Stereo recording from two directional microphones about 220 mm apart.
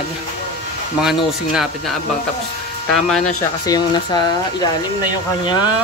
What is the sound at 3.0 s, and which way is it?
Speech, centre (ahead or behind).